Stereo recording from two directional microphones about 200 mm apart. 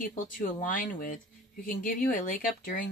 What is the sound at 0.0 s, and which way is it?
Speech, 45° left (ahead or behind).